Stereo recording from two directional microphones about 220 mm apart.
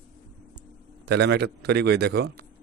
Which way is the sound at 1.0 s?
50° right (ahead or behind).